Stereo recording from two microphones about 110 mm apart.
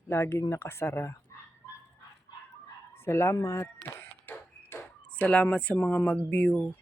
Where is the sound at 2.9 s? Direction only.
20° left (ahead or behind).